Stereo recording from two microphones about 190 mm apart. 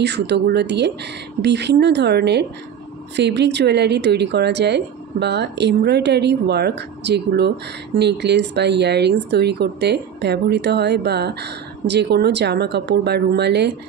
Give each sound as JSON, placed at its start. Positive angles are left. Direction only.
{"t": 0.0, "sound": "speech", "side_deg": -65}